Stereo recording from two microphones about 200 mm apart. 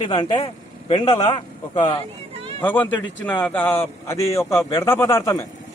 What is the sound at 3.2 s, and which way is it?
A man's voice, 5° left (ahead or behind).